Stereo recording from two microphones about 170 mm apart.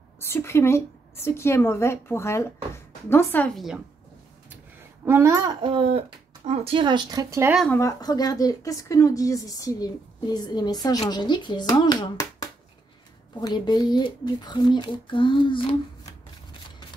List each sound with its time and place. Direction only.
0.3 s a woman's voice: 15° left (ahead or behind); by 3.8 s centre (ahead or behind)
5.0 s speech: 15° right (ahead or behind)
7.7 s a woman's voice: 20° left (ahead or behind)